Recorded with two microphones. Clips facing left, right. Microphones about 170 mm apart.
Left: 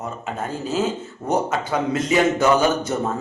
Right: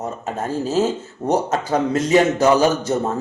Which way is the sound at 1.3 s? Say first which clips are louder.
Right 2 dB; 40° right (ahead or behind).